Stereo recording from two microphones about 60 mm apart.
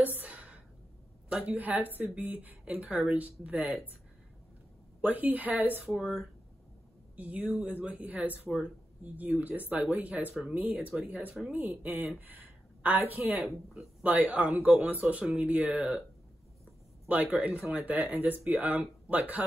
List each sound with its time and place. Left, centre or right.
0.0 s a sound: right
1.3 s speech: right
5.0 s speech: right
5.9 s speech: centre
7.2 s speech: right
17.1 s speech: right